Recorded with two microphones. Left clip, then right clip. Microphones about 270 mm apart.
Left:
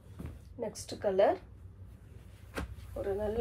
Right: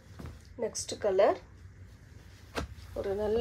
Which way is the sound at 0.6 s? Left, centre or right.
Right.